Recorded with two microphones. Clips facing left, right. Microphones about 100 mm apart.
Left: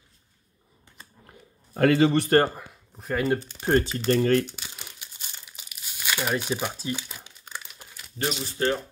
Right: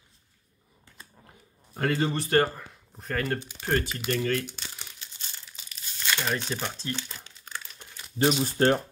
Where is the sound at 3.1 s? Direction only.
15° left (ahead or behind).